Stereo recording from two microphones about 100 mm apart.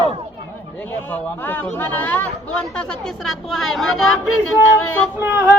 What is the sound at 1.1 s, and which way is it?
A woman's voice, 15° left (ahead or behind).